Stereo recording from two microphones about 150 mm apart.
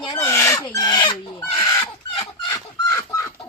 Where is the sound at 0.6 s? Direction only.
25° left (ahead or behind).